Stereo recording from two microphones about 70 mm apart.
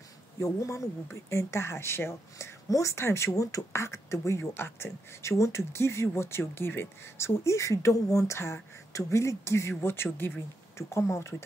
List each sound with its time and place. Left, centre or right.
0.4 s speech: left
9.8 s speech: left
10.8 s speech: left